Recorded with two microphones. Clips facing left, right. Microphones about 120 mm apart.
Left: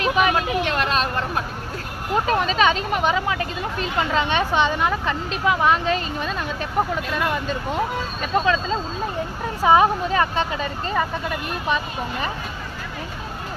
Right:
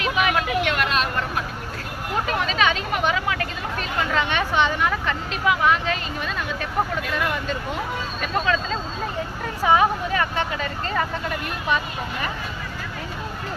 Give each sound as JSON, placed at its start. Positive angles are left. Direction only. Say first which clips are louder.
{"t": 0.0, "sound": "speech", "louder": "left 3 dB", "side_deg": 35}
{"t": 2.2, "sound": "speech", "louder": "left 3 dB", "side_deg": 35}